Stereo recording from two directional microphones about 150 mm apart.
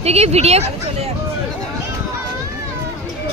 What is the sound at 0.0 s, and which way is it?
Speech, 45° right (ahead or behind).